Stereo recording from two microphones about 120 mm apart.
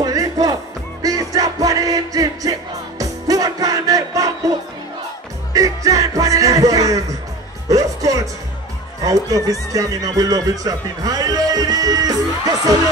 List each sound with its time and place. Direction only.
0.0 s music: 30° right (ahead or behind)
5.5 s music: 30° right (ahead or behind)
9.0 s speech: 30° right (ahead or behind)